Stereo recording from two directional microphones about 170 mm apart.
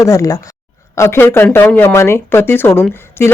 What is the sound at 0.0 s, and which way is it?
A woman's voice, 20° left (ahead or behind).